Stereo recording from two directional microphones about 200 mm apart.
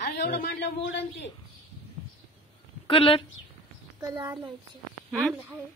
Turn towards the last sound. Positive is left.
turn(degrees=0)  # may be behind; listen again after turning